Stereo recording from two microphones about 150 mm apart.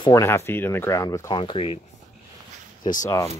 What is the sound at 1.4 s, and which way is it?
Speech, 35° left (ahead or behind).